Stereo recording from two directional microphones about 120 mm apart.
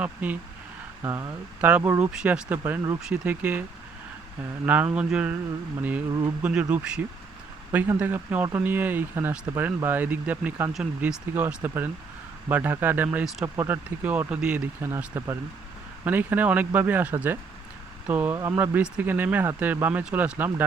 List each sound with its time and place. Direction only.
0.0 s speech: 10° right (ahead or behind)
1.0 s speech: 25° right (ahead or behind)
1.6 s speech: 15° right (ahead or behind)
4.6 s speech: 15° right (ahead or behind)
6.4 s speech: 10° right (ahead or behind)
18.3 s speech: 30° right (ahead or behind)
18.6 s speech: 15° right (ahead or behind)